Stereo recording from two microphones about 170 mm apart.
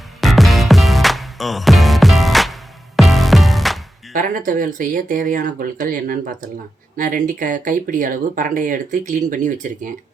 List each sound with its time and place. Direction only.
0.2 s music: centre (ahead or behind)
4.1 s speech: 50° right (ahead or behind)